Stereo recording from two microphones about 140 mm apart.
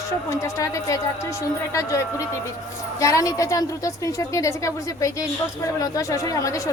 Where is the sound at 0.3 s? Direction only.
20° left (ahead or behind).